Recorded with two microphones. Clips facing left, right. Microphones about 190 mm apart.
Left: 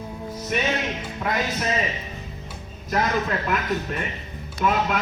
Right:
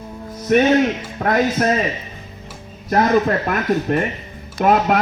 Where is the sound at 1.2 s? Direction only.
50° right (ahead or behind).